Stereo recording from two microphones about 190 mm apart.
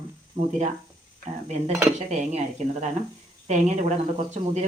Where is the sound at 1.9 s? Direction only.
35° right (ahead or behind).